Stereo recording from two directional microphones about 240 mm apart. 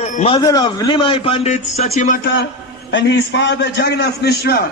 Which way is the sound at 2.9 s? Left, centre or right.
Left.